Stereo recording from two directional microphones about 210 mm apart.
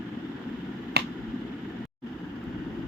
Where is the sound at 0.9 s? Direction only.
50° right (ahead or behind).